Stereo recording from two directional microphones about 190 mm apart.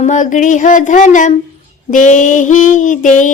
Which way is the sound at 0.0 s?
40° left (ahead or behind).